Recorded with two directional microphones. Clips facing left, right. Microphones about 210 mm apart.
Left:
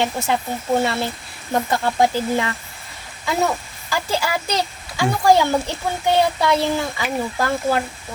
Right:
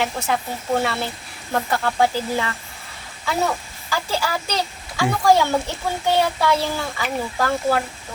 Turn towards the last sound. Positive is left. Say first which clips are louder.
# even
turn(degrees=15)  # may be behind; listen again after turning